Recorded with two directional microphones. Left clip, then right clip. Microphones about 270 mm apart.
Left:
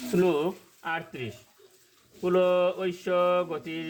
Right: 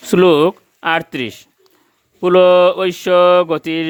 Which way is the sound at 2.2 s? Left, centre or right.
Right.